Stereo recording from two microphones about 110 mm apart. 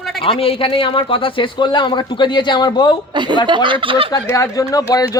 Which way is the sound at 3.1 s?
45° right (ahead or behind).